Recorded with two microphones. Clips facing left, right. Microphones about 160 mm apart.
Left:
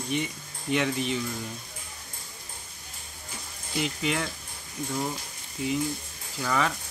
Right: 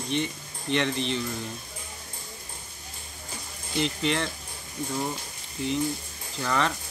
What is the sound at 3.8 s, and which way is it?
Speech, 10° left (ahead or behind).